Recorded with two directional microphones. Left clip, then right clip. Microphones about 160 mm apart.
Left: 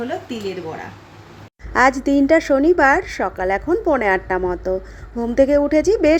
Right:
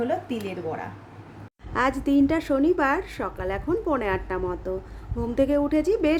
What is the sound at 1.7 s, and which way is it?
A woman's voice, 25° left (ahead or behind).